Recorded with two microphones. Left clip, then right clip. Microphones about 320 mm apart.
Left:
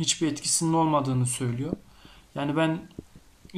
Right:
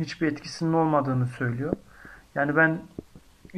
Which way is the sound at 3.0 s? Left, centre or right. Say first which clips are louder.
Right 3 dB; right.